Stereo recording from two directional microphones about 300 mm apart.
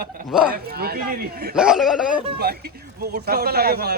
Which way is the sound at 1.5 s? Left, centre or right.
Centre.